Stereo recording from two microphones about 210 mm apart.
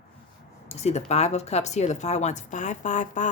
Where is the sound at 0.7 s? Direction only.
30° left (ahead or behind).